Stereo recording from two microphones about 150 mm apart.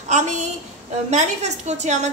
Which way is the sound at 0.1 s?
50° right (ahead or behind).